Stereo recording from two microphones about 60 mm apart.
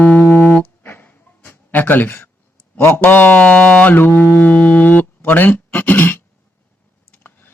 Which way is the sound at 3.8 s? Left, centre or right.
Left.